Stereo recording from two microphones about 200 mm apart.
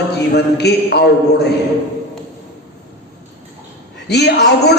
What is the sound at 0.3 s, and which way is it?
A man's voice, 55° left (ahead or behind).